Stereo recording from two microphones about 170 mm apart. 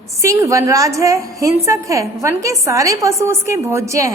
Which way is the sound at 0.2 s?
15° right (ahead or behind).